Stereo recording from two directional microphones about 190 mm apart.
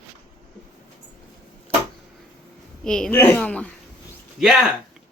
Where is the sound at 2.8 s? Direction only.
5° left (ahead or behind).